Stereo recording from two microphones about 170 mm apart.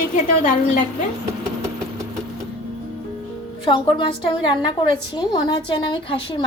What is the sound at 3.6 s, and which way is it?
A woman's voice, 30° left (ahead or behind).